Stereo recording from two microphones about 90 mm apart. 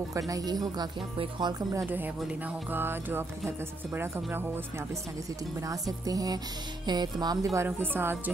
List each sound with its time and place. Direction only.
0.3 s music: 45° right (ahead or behind)
1.1 s speech: 75° right (ahead or behind)
2.7 s speech: 25° right (ahead or behind)
6.0 s music: 45° right (ahead or behind)
7.5 s speech: 25° right (ahead or behind)